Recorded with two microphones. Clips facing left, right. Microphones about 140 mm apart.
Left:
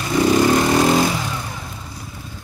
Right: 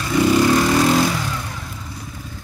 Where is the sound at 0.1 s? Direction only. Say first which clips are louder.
Even; 15° left (ahead or behind).